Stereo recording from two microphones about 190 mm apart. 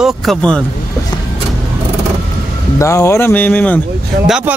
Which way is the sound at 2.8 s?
15° left (ahead or behind).